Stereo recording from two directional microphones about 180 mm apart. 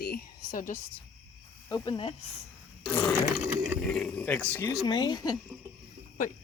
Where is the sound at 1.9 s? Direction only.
30° left (ahead or behind).